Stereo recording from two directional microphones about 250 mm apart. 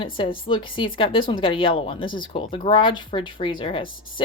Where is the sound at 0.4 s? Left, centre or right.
Left.